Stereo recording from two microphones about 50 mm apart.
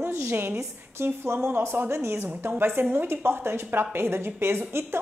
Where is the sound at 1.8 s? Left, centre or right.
Right.